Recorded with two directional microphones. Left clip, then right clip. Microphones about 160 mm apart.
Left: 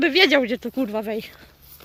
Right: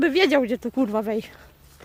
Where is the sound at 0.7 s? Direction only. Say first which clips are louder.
Right 1 dB; 20° right (ahead or behind).